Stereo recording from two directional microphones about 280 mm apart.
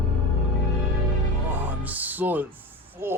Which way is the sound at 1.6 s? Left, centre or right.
Centre.